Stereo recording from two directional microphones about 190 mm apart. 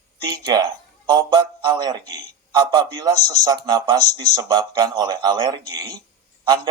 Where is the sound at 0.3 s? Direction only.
25° right (ahead or behind).